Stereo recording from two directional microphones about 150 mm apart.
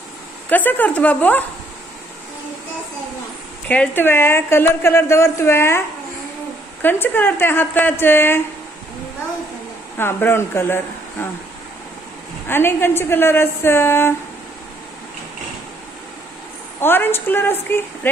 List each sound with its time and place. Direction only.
0.5 s a woman's voice: 10° left (ahead or behind)
3.6 s a woman's voice: 10° left (ahead or behind)
9.9 s a woman's voice: 15° left (ahead or behind)
12.4 s a woman's voice: 15° left (ahead or behind)
16.8 s a woman's voice: 15° left (ahead or behind)